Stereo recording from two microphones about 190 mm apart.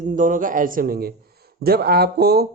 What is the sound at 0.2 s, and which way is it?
Speech, 45° right (ahead or behind).